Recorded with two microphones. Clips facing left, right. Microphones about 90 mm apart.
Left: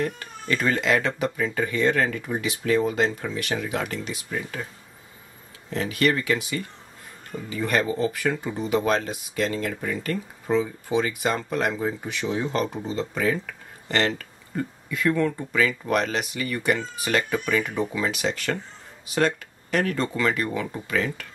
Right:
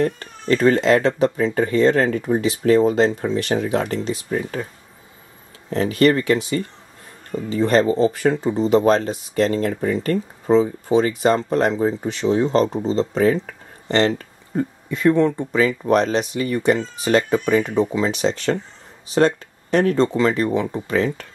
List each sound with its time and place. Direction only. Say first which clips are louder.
0.0 s speech: right 7 dB; 35° right (ahead or behind)
5.7 s speech: right 7 dB; 35° right (ahead or behind)